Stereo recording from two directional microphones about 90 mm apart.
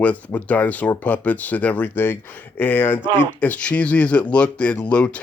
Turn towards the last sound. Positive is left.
turn(degrees=10)  # may be behind; listen again after turning